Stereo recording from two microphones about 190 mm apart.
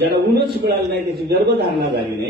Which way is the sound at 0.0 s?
60° right (ahead or behind).